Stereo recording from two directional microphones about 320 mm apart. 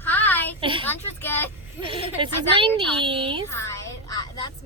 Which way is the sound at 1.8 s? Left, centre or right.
Centre.